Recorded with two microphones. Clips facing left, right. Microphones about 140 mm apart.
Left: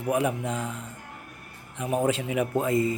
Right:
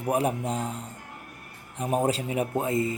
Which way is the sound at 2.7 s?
20° left (ahead or behind).